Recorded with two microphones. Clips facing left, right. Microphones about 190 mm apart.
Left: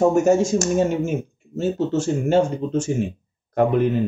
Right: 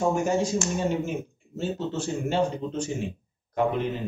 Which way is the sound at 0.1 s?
45° left (ahead or behind).